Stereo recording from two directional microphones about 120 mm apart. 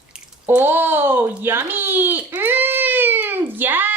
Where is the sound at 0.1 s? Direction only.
15° right (ahead or behind).